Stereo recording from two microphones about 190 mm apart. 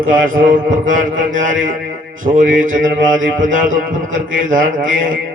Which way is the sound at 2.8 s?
85° right.